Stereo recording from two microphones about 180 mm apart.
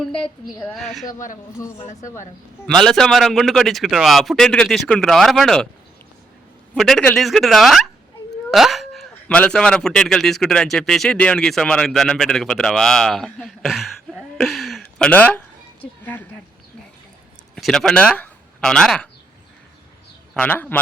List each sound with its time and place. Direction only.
0.0 s a man's voice: 5° left (ahead or behind)
2.0 s a man's voice: 15° left (ahead or behind)
2.6 s a man's voice: centre (ahead or behind)
6.7 s a man's voice: centre (ahead or behind)
17.5 s speech: 5° left (ahead or behind)
20.3 s a man's voice: 10° left (ahead or behind)